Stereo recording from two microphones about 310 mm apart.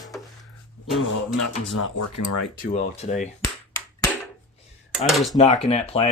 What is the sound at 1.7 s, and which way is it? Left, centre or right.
Speech, left.